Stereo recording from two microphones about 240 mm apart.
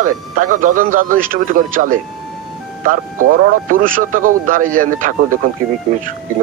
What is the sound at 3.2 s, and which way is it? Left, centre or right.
Speech, right.